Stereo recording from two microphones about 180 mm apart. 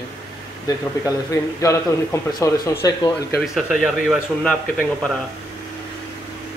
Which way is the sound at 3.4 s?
5° right (ahead or behind).